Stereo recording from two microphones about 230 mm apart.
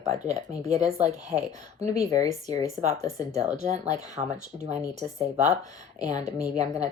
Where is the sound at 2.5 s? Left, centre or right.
Right.